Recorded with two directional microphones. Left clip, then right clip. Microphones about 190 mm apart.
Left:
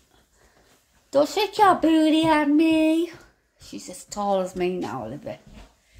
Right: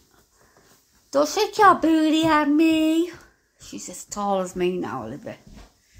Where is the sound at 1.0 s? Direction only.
Centre (ahead or behind).